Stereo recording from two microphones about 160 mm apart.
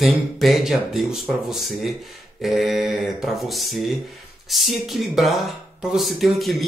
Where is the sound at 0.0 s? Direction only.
Centre (ahead or behind).